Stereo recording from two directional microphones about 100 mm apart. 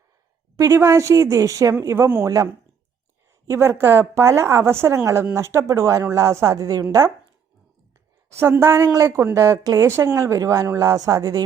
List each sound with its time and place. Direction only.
0.5 s speech: 30° right (ahead or behind)
8.3 s speech: 25° right (ahead or behind)